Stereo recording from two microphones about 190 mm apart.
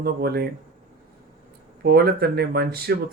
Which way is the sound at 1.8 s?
60° right (ahead or behind).